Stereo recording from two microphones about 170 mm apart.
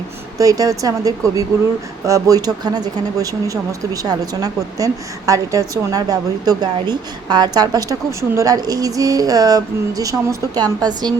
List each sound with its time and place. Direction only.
0.3 s speech: 20° right (ahead or behind)